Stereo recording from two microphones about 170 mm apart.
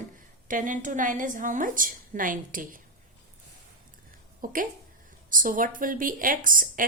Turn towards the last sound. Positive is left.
turn(degrees=-55)  # may be behind; listen again after turning